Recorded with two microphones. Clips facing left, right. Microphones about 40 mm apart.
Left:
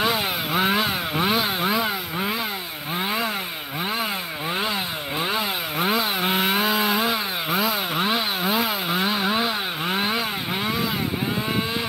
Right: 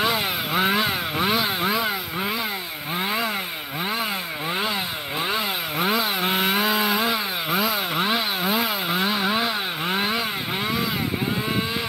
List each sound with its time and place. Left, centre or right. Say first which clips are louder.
0.0 s chainsaw: even; centre
5.2 s chainsaw: even; centre